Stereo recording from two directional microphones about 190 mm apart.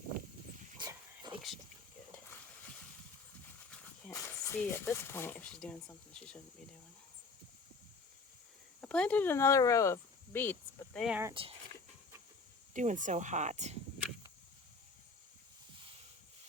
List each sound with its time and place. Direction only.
0.8 s dog: 20° right (ahead or behind)
4.1 s speech: 10° left (ahead or behind)
8.8 s speech: 5° left (ahead or behind)
11.0 s speech: 10° right (ahead or behind)
12.7 s speech: 40° right (ahead or behind)